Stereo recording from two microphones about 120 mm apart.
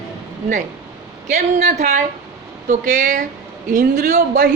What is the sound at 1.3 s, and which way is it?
Speech, 75° right (ahead or behind).